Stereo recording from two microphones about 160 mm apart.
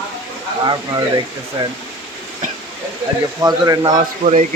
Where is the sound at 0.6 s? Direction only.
25° right (ahead or behind).